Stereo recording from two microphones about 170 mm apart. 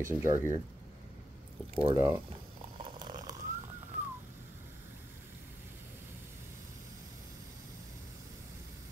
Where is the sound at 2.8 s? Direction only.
25° right (ahead or behind).